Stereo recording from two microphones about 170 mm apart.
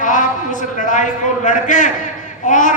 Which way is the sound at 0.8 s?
50° left (ahead or behind).